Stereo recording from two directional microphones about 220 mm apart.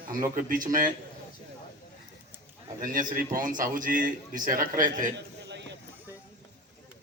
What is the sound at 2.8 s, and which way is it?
A man's voice, 40° right (ahead or behind).